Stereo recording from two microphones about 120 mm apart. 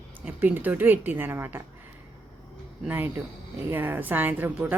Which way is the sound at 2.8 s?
15° right (ahead or behind).